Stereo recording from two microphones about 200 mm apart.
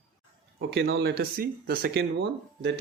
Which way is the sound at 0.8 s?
55° right (ahead or behind).